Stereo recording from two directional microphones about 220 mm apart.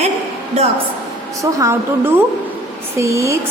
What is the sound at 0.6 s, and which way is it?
Speech, 30° right (ahead or behind).